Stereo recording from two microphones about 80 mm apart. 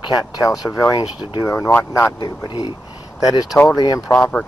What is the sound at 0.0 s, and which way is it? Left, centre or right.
Speech, left.